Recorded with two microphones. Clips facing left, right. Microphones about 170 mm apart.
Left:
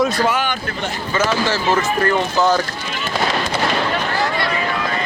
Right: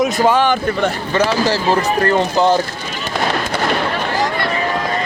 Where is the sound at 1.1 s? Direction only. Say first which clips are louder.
Right 1 dB; 35° right (ahead or behind).